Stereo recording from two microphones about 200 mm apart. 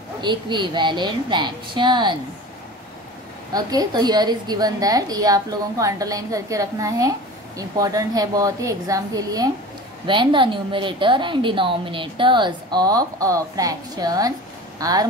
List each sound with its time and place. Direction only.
0.2 s a woman's voice: 20° right (ahead or behind)
3.5 s a woman's voice: 20° right (ahead or behind)